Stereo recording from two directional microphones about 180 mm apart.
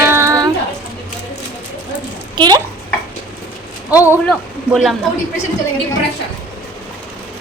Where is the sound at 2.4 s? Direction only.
20° right (ahead or behind).